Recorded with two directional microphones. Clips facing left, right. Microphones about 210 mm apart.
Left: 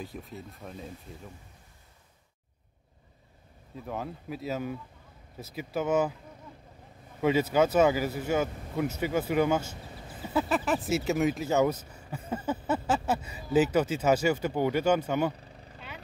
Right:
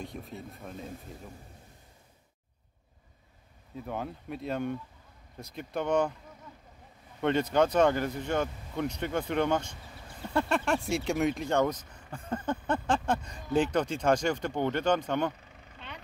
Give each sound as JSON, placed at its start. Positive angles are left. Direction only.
{"t": 0.0, "sound": "speech", "side_deg": 0}
{"t": 3.7, "sound": "speech", "side_deg": 0}
{"t": 7.2, "sound": "speech", "side_deg": 5}
{"t": 15.4, "sound": "vehicle", "side_deg": 35}